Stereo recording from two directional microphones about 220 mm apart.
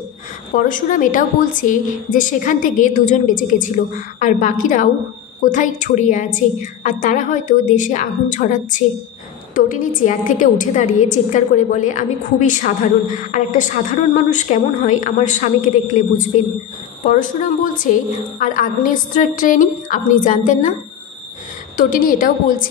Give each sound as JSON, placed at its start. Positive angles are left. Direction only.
{"t": 0.6, "sound": "a woman's voice", "side_deg": 35}
{"t": 21.7, "sound": "a woman's voice", "side_deg": 40}